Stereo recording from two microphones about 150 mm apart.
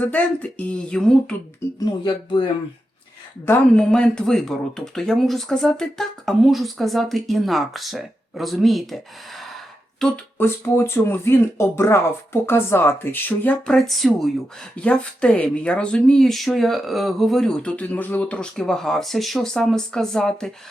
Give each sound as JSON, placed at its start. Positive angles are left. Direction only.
{"t": 0.0, "sound": "speech", "side_deg": 10}
{"t": 1.8, "sound": "speech", "side_deg": 30}
{"t": 3.4, "sound": "speech", "side_deg": 15}